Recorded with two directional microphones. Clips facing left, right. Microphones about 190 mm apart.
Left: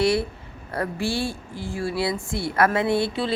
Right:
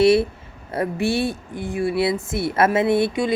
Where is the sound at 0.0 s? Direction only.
25° right (ahead or behind).